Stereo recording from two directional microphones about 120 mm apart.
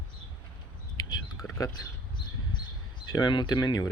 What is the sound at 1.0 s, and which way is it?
Bird, 30° left (ahead or behind).